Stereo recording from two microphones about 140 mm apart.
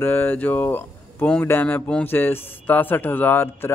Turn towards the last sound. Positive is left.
turn(degrees=15)  # may be behind; listen again after turning